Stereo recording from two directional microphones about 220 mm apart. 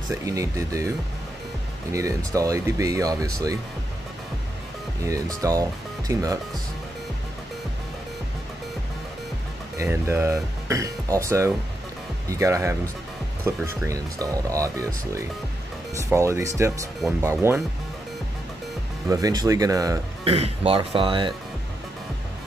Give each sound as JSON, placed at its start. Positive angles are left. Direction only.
{"t": 0.1, "sound": "speech", "side_deg": -15}
{"t": 5.0, "sound": "speech", "side_deg": -15}
{"t": 9.8, "sound": "speech", "side_deg": -10}
{"t": 19.0, "sound": "speech", "side_deg": -15}
{"t": 20.2, "sound": "speech", "side_deg": -25}